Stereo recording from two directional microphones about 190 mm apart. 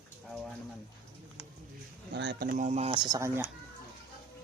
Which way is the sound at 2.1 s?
65° right (ahead or behind).